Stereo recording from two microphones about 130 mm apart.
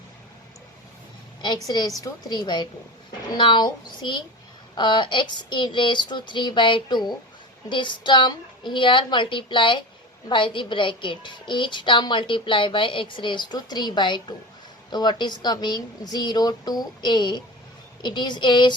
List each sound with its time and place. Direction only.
1.6 s a woman's voice: 30° left (ahead or behind)